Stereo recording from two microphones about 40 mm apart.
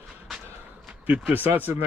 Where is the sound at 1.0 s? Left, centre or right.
Right.